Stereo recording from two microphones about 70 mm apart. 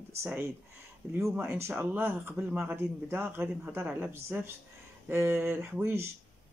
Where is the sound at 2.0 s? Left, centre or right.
Right.